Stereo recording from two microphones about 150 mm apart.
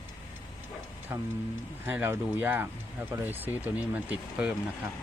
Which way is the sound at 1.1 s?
15° right (ahead or behind).